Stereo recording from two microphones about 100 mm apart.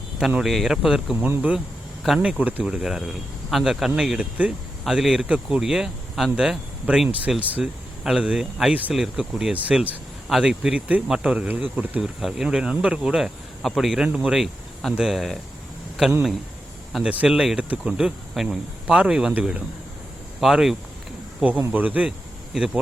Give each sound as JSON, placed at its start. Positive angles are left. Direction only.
{"t": 0.2, "sound": "speech", "side_deg": -5}
{"t": 1.2, "sound": "speech", "side_deg": -15}
{"t": 10.2, "sound": "speech", "side_deg": 0}
{"t": 12.2, "sound": "speech", "side_deg": -5}
{"t": 16.9, "sound": "speech", "side_deg": -10}
{"t": 21.7, "sound": "speech", "side_deg": -15}